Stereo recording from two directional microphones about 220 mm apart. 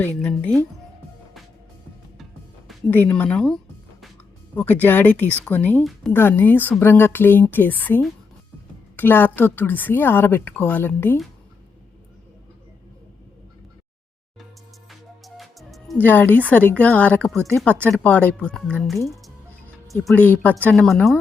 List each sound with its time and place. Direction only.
0.0 s speech: 5° left (ahead or behind)
2.9 s speech: 10° left (ahead or behind)
14.8 s music: centre (ahead or behind)
17.5 s speech: 5° left (ahead or behind)